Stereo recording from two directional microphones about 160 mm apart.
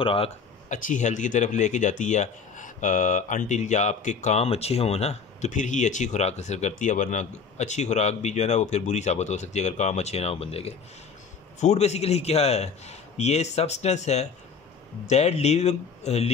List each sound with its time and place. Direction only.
0.0 s speech: 35° left (ahead or behind)
0.7 s speech: 55° left (ahead or behind)